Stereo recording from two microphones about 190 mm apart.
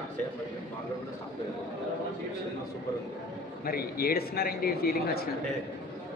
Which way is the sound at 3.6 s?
50° left (ahead or behind).